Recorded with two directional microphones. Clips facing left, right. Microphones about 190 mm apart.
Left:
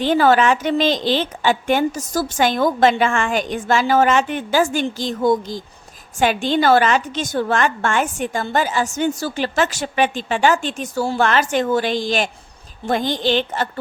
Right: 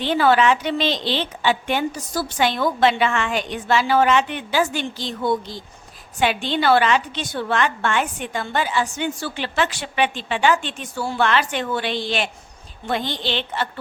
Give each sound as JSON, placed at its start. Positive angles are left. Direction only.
{"t": 0.0, "sound": "a woman's voice", "side_deg": 45}